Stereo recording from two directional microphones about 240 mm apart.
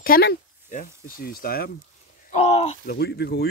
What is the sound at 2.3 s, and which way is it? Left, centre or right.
Speech, left.